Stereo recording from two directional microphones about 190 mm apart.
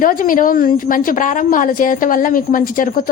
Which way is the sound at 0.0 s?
45° left (ahead or behind).